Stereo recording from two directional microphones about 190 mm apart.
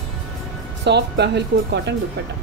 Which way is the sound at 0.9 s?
60° right (ahead or behind).